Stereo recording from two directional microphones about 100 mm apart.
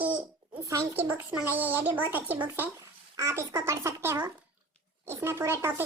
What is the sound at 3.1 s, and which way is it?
Speech, 30° right (ahead or behind).